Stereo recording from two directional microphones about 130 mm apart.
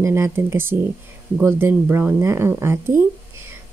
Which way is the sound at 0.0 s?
20° right (ahead or behind).